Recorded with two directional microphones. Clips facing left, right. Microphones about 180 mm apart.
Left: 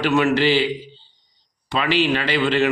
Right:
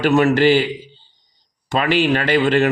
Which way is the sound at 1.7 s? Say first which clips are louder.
Right 3 dB; 45° right (ahead or behind).